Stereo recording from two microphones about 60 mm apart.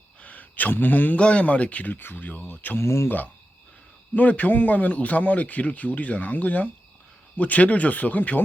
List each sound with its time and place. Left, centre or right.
0.2 s a sound: left
1.2 s a man's voice: centre
2.7 s speech: left
4.1 s a man's voice: left